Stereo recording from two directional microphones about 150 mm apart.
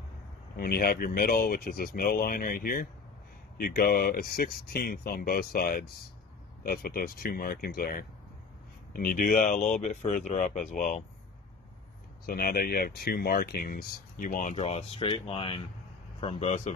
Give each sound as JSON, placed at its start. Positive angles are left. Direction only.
{"t": 0.6, "sound": "speech", "side_deg": 90}
{"t": 8.9, "sound": "speech", "side_deg": 70}
{"t": 12.3, "sound": "speech", "side_deg": 85}